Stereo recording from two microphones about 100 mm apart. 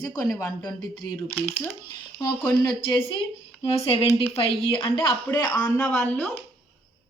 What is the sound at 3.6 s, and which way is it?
Speech, 75° left (ahead or behind).